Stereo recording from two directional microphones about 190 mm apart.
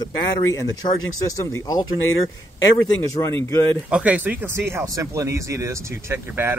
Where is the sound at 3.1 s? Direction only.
15° left (ahead or behind).